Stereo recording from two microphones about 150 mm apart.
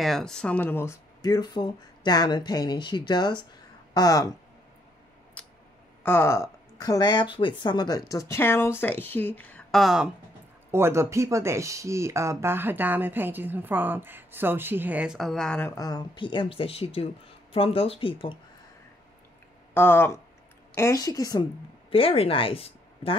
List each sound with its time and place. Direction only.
0.0 s speech: 5° left (ahead or behind)
1.2 s speech: 25° left (ahead or behind)
5.4 s a sound: 10° left (ahead or behind)
6.0 s speech: 15° left (ahead or behind); by 10.1 s 5° right (ahead or behind)
10.7 s speech: 15° right (ahead or behind); by 15.6 s 5° left (ahead or behind)
15.6 s speech: 25° left (ahead or behind)
19.7 s speech: 15° left (ahead or behind)
21.9 s speech: 40° left (ahead or behind)